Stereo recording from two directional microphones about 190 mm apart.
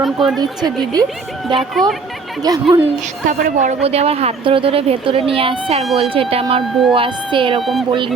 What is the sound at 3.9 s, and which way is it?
Speech, 30° right (ahead or behind).